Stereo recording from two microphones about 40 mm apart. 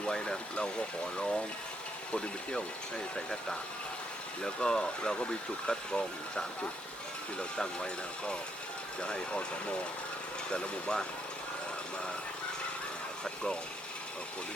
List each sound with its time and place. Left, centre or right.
0.5 s speech: left
4.4 s speech: centre
10.5 s speech: left